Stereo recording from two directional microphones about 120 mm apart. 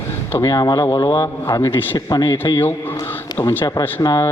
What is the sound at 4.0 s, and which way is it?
Speech, 30° left (ahead or behind).